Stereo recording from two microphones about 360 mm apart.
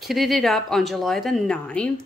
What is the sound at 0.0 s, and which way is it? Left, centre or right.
Speech, centre.